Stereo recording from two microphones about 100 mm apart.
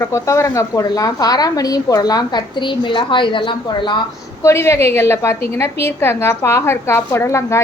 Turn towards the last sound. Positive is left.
turn(degrees=30)  # may be behind; listen again after turning